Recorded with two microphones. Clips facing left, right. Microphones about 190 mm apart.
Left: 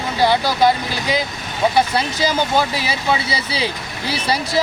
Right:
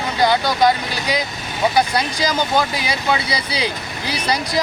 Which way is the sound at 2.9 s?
30° left (ahead or behind).